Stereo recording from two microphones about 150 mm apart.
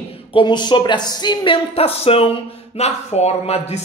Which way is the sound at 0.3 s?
30° left (ahead or behind).